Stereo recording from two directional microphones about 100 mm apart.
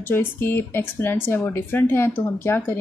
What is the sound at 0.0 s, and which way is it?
Speech, 20° left (ahead or behind).